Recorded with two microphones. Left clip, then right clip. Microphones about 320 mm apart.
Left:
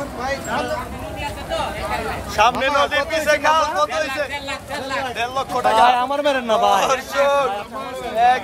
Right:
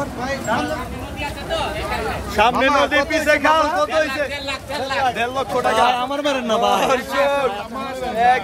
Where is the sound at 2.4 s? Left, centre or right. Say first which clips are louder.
Right 1 dB; centre.